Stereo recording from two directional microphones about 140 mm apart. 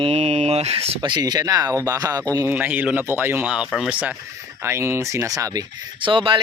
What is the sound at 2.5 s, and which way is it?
Speech, 10° right (ahead or behind).